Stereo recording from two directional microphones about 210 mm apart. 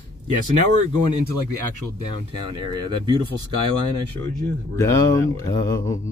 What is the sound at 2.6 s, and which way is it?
Speech, 20° right (ahead or behind).